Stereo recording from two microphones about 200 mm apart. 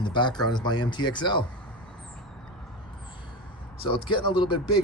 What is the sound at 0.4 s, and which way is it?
Speech, 20° left (ahead or behind).